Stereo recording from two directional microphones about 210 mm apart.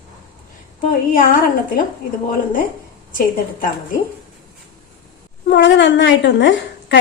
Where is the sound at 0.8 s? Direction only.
40° left (ahead or behind).